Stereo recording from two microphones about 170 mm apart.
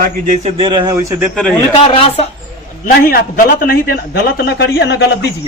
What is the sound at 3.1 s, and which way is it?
A man's voice, 55° left (ahead or behind).